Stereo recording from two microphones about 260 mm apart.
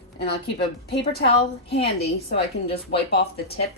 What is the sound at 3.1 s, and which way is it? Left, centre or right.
Speech, left.